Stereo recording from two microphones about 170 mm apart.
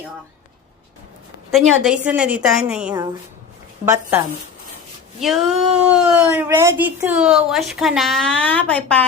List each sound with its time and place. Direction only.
1.5 s speech: centre (ahead or behind)
3.8 s a woman's voice: 15° right (ahead or behind)
5.2 s speech: centre (ahead or behind)